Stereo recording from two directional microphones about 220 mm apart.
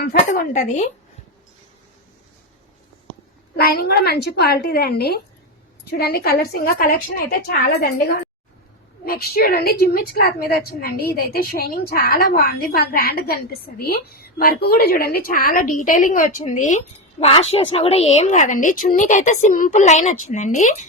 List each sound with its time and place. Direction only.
0.0 s a woman's voice: 40° left (ahead or behind)
3.5 s a woman's voice: 45° left (ahead or behind)